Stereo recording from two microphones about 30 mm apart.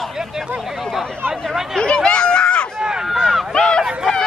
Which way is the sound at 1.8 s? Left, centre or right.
Left.